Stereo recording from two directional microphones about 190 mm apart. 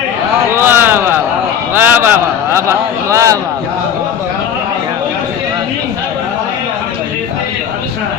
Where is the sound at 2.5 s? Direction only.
15° right (ahead or behind).